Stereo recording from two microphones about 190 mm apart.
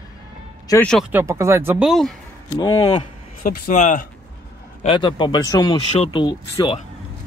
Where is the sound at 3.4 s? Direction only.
45° left (ahead or behind).